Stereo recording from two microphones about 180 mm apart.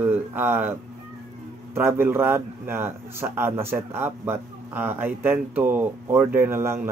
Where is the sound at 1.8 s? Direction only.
15° right (ahead or behind).